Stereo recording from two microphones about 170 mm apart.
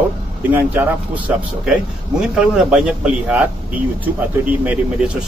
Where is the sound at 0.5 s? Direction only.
10° right (ahead or behind).